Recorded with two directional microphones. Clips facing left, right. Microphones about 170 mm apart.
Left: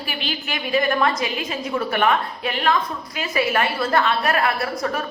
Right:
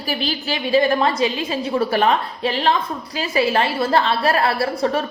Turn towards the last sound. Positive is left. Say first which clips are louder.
# right 4 dB
turn(degrees=-30)  # may be behind; listen again after turning